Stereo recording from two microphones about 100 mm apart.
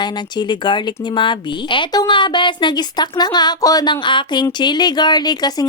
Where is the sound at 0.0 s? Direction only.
50° left (ahead or behind).